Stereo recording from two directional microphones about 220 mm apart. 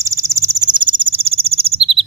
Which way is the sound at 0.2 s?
15° right (ahead or behind).